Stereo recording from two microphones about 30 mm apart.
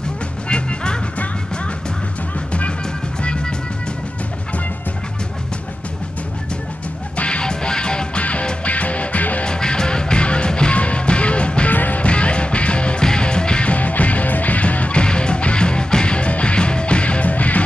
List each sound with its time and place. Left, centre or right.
0.5 s music: left
3.2 s music: left
7.2 s music: left
8.2 s music: left
9.4 s music: left
11.7 s music: left
12.0 s music: left
13.7 s music: left
14.9 s music: left
16.3 s music: left
17.2 s music: left